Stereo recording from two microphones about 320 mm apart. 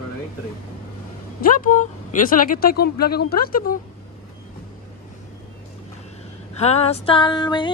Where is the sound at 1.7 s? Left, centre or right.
Left.